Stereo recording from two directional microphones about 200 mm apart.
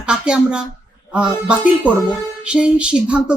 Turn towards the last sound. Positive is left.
turn(degrees=-5)  # may be behind; listen again after turning